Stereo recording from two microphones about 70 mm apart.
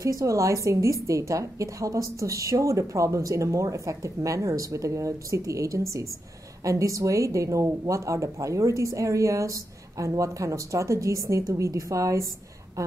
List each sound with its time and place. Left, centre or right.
0.0 s a woman's voice: right